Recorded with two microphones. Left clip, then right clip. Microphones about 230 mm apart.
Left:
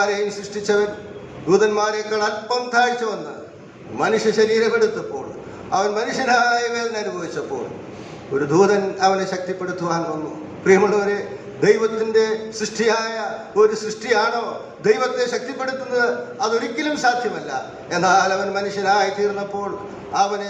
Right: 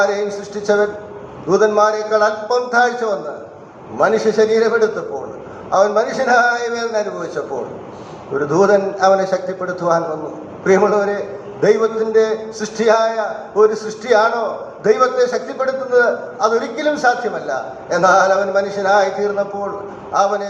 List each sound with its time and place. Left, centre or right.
0.0 s a man's voice: left
8.4 s a man's voice: left